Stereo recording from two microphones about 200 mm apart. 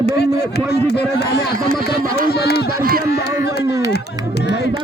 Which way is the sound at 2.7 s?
50° right (ahead or behind).